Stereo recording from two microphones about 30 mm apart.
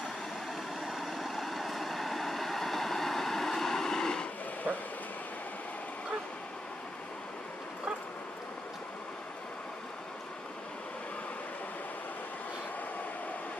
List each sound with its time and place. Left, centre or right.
0.8 s vehicle: centre; by 4.3 s left
4.7 s vehicle: right